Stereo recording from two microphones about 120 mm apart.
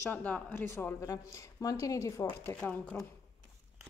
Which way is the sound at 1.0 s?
30° left (ahead or behind).